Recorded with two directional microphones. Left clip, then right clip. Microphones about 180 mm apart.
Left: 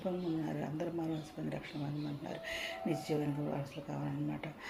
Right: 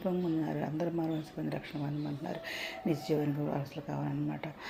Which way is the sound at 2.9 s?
35° right (ahead or behind).